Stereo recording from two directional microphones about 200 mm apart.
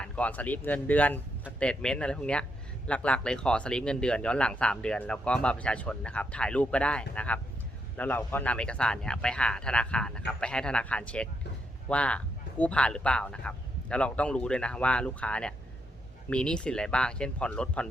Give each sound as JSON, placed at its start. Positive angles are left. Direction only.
{"t": 0.0, "sound": "speech", "side_deg": 5}